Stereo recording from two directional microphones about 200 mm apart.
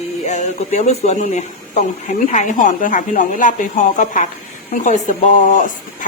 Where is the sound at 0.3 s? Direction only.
35° left (ahead or behind).